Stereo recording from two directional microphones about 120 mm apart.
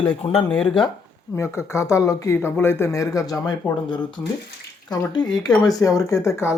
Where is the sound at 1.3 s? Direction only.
25° left (ahead or behind).